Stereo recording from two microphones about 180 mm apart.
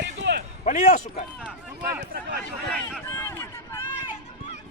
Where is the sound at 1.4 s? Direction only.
5° right (ahead or behind).